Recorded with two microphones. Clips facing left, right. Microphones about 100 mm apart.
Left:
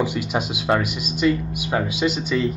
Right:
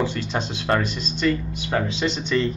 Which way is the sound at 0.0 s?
10° left (ahead or behind).